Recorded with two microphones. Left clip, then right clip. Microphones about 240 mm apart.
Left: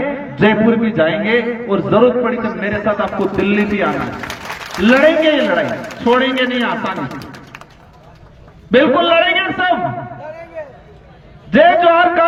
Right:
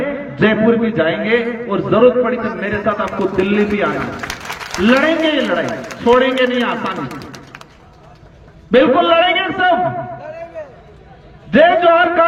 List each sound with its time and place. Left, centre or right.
0.0 s a man's voice: left
8.7 s a sound: left
11.5 s a man's voice: left